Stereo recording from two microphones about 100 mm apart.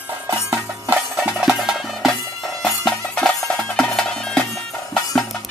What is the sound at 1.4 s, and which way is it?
Music, 5° right (ahead or behind).